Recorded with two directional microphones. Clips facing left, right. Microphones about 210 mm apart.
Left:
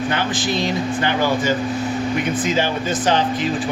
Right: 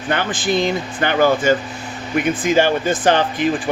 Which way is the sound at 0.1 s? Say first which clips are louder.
Right 2 dB; 50° right (ahead or behind).